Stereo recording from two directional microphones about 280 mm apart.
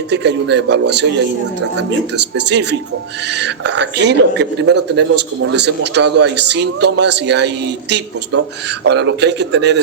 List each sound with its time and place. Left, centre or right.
0.1 s speech: right